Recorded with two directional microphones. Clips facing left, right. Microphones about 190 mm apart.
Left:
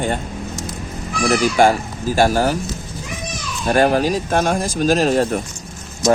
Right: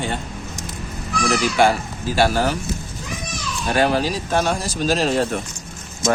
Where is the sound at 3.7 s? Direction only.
45° left (ahead or behind).